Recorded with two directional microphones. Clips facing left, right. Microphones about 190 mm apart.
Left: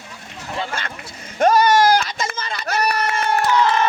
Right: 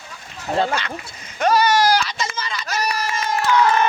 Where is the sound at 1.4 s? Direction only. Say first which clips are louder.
Left 2 dB; 50° left (ahead or behind).